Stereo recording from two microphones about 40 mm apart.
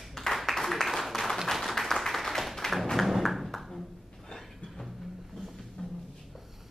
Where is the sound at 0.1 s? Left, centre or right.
Centre.